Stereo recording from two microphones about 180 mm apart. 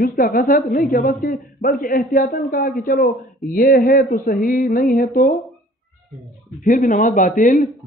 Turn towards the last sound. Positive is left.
turn(degrees=45)  # may be behind; listen again after turning